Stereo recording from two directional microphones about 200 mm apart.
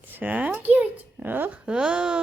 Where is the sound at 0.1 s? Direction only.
10° right (ahead or behind).